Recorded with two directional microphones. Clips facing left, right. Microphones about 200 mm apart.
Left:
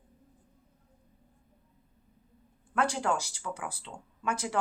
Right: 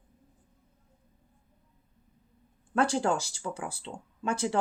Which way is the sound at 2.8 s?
30° right (ahead or behind).